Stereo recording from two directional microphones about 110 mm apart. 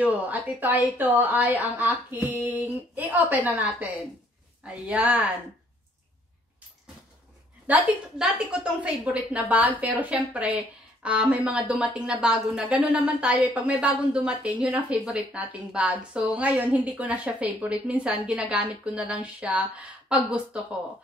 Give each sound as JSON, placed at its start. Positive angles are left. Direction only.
{"t": 0.0, "sound": "a woman's voice", "side_deg": -15}
{"t": 7.6, "sound": "a woman's voice", "side_deg": -15}